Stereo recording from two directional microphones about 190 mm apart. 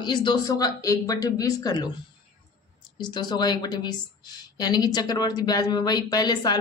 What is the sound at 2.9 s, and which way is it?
A woman's voice, 20° left (ahead or behind).